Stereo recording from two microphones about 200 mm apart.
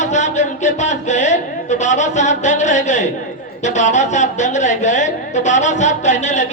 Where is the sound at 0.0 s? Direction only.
35° left (ahead or behind).